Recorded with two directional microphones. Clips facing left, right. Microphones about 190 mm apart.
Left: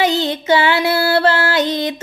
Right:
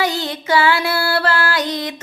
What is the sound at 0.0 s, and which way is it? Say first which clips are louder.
Music: left 4 dB; 25° left (ahead or behind).